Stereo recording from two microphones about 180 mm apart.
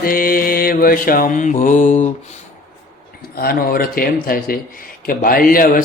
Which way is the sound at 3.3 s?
55° left (ahead or behind).